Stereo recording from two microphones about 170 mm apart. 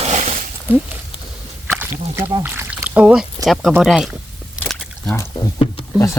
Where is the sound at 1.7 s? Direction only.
10° right (ahead or behind).